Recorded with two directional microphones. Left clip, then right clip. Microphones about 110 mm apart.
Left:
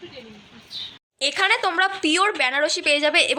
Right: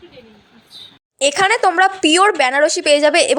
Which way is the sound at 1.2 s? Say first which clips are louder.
Right 6 dB; 75° right (ahead or behind).